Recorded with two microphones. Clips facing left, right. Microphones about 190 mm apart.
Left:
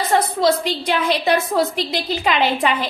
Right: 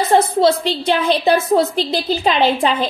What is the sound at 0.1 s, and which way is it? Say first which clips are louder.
A woman's voice: right 3 dB; 30° right (ahead or behind).